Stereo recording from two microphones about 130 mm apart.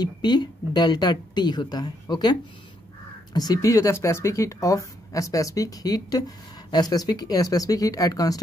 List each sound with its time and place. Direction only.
0.0 s a woman's voice: 35° left (ahead or behind)
3.3 s a woman's voice: 30° left (ahead or behind)